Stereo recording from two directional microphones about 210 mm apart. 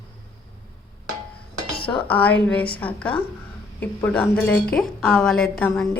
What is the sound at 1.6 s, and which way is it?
Dishes, 50° left (ahead or behind).